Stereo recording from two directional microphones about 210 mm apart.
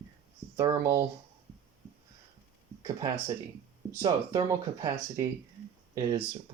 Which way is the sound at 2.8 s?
15° right (ahead or behind).